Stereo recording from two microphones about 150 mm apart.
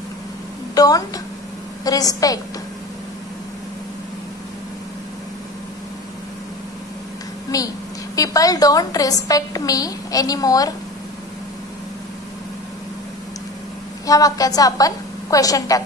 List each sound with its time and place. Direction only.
0.7 s a woman's voice: 25° left (ahead or behind)
7.5 s a woman's voice: 25° left (ahead or behind)
14.0 s a woman's voice: 25° left (ahead or behind)